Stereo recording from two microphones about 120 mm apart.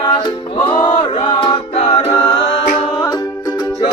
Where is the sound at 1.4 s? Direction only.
50° left (ahead or behind).